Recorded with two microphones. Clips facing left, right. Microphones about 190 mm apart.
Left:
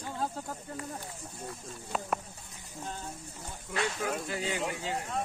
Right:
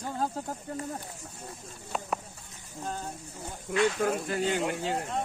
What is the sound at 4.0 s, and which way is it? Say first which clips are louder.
Speech: right 5 dB; 50° right (ahead or behind).